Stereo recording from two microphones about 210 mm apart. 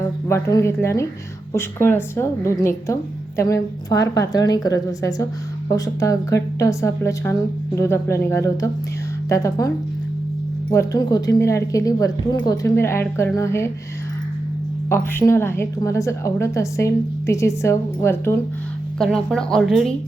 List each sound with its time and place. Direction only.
0.3 s a woman's voice: 15° left (ahead or behind)
14.8 s a woman's voice: 10° left (ahead or behind)